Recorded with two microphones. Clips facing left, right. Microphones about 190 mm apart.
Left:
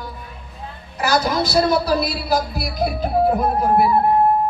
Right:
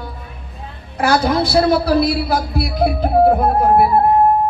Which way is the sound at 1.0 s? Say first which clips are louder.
Right 4 dB; 55° right (ahead or behind).